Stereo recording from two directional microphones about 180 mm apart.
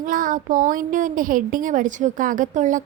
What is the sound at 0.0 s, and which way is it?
A woman's voice, 50° right (ahead or behind).